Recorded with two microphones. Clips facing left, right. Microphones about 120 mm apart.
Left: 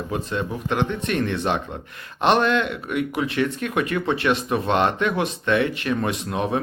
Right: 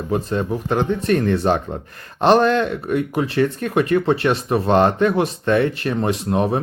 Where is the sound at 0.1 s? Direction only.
35° right (ahead or behind).